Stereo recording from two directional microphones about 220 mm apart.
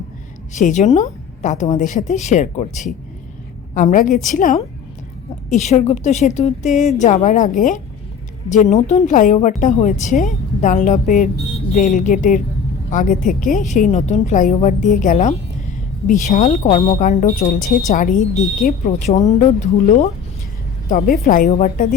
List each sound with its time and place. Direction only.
0.6 s a woman's voice: 30° left (ahead or behind)
3.8 s a woman's voice: 35° left (ahead or behind)
16.6 s speech: 25° left (ahead or behind)
16.9 s a woman's voice: 35° left (ahead or behind)
20.9 s a woman's voice: 40° left (ahead or behind)